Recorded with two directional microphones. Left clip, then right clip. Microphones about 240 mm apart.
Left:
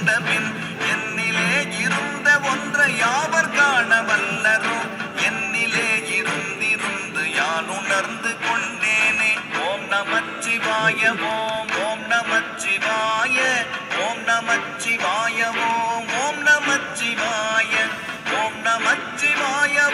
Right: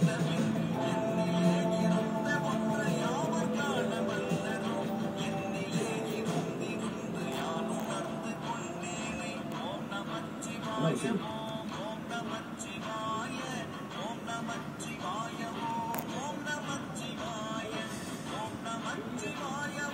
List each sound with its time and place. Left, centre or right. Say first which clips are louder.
0.8 s music: left 13 dB; left
7.3 s music: left 13 dB; left